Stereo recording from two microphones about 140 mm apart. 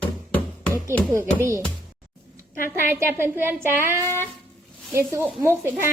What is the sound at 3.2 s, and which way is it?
Speech, 15° right (ahead or behind).